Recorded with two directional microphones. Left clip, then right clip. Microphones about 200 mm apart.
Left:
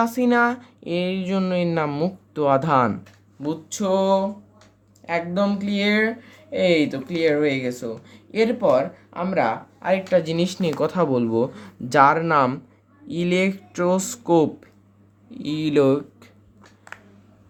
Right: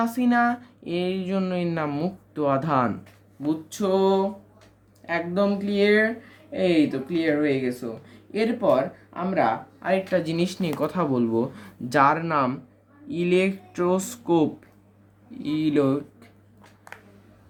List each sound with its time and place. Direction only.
0.0 s speech: 30° left (ahead or behind)